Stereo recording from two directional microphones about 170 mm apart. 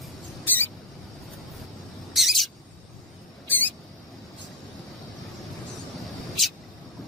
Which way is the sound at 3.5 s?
10° left (ahead or behind).